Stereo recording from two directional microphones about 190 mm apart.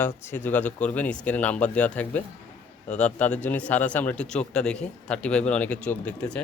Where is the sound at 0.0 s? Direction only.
10° left (ahead or behind).